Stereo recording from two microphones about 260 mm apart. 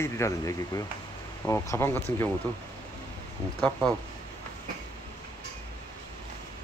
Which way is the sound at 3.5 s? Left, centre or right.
Centre.